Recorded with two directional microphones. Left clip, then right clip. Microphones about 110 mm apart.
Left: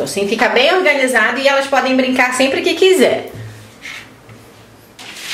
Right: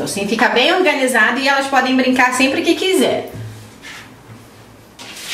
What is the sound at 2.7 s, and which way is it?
Speech, 40° left (ahead or behind).